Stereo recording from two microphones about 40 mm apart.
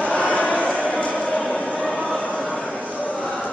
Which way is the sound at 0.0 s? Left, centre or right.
Left.